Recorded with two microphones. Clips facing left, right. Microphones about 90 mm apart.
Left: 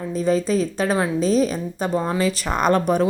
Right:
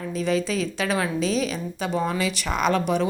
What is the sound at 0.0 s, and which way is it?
A woman's voice, 35° left (ahead or behind).